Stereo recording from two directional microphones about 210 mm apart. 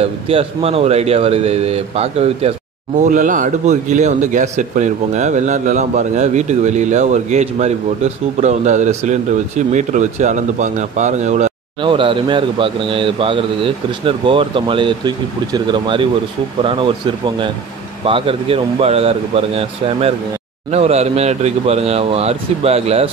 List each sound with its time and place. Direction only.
0.0 s speech: 25° right (ahead or behind)
18.0 s speech: 25° right (ahead or behind)